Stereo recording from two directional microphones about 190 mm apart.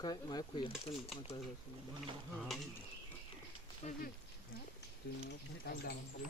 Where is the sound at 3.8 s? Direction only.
35° left (ahead or behind).